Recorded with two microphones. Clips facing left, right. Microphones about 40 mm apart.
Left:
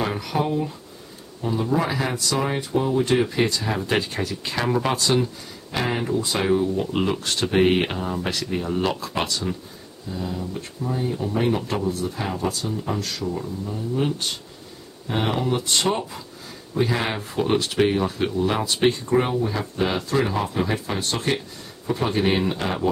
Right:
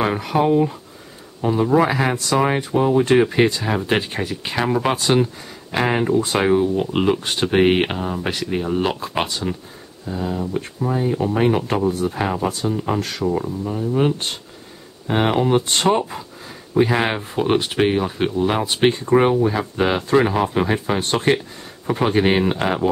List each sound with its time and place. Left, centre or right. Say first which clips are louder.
0.0 s speech: right 6 dB; right